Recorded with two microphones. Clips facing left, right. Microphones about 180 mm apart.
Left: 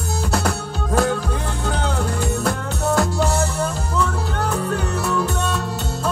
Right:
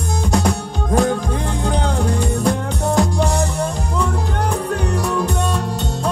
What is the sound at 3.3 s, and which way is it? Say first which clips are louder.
Music: right 1 dB; 15° right (ahead or behind).